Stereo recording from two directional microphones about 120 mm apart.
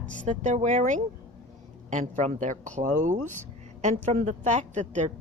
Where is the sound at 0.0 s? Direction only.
90° right.